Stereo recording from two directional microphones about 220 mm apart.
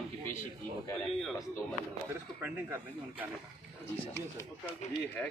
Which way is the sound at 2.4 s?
10° right (ahead or behind).